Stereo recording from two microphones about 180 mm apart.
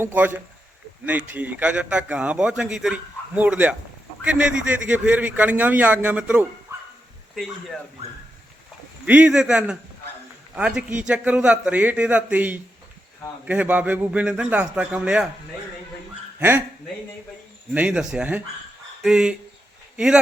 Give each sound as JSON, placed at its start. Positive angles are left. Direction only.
{"t": 0.0, "sound": "a man's voice", "side_deg": -10}
{"t": 9.0, "sound": "a man's voice", "side_deg": -5}
{"t": 16.4, "sound": "a man's voice", "side_deg": -10}
{"t": 17.7, "sound": "a man's voice", "side_deg": -5}